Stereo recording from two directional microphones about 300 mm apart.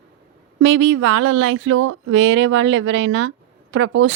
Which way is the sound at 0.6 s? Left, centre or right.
Right.